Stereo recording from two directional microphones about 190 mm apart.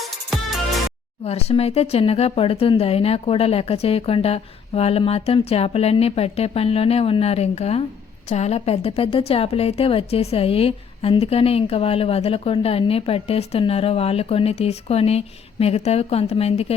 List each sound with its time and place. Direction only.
1.2 s a woman's voice: 35° left (ahead or behind)